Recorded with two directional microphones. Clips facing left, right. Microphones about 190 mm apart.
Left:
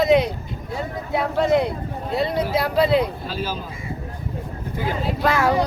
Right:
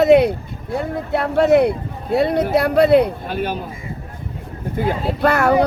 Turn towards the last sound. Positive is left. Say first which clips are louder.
# right 4 dB
turn(degrees=-60)  # may be behind; listen again after turning